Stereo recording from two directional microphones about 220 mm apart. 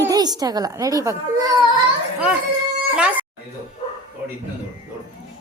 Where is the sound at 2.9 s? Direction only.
5° right (ahead or behind).